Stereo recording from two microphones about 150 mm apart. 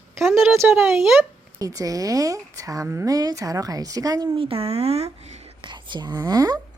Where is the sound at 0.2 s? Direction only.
Centre (ahead or behind).